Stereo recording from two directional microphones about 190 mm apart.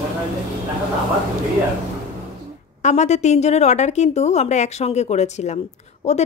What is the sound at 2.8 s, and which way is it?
A woman's voice, 35° left (ahead or behind).